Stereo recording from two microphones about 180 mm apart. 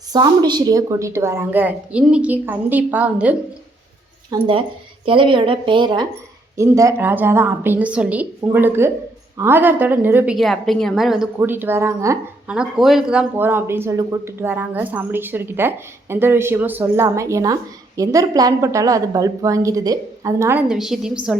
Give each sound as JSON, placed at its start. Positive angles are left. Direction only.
{"t": 0.1, "sound": "a woman's voice", "side_deg": -25}
{"t": 4.3, "sound": "a woman's voice", "side_deg": -30}
{"t": 10.3, "sound": "a woman's voice", "side_deg": 0}